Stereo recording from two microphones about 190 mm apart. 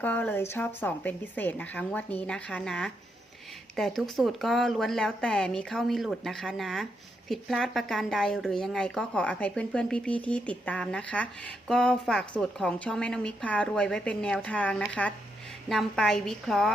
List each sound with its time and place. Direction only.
0.0 s a woman's voice: 10° left (ahead or behind)